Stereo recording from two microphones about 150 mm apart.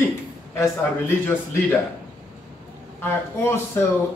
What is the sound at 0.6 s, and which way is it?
Speech, 15° left (ahead or behind).